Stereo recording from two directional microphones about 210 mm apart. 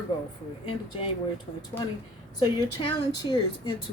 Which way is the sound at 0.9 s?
25° left (ahead or behind).